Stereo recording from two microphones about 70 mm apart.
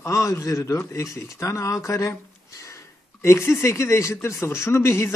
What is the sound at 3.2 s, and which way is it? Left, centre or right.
A man's voice, left.